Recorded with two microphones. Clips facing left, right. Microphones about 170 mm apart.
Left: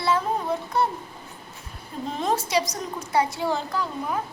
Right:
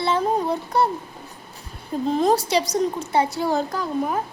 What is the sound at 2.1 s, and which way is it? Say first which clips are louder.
A child's voice: right 4 dB; 35° right (ahead or behind).